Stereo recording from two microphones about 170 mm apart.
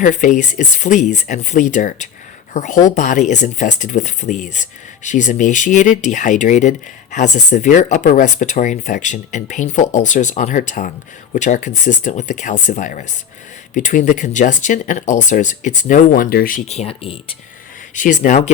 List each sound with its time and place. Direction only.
0.0 s speech: 45° left (ahead or behind)
16.6 s speech: 35° left (ahead or behind)
17.9 s speech: 50° left (ahead or behind)